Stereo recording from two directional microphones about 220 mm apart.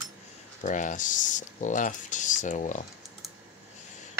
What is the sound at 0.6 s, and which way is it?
Speech, 35° left (ahead or behind).